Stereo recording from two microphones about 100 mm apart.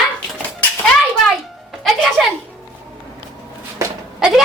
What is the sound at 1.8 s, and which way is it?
Music, centre (ahead or behind).